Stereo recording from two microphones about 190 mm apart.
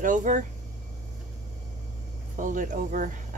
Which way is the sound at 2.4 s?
40° right (ahead or behind).